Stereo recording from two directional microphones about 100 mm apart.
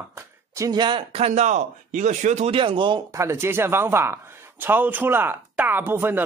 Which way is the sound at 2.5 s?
60° right (ahead or behind).